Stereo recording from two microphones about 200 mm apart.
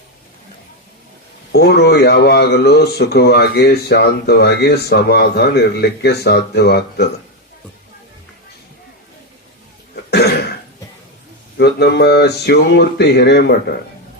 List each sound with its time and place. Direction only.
1.5 s speech: 55° left (ahead or behind)
9.9 s cough: 55° left (ahead or behind)
11.5 s speech: 55° left (ahead or behind)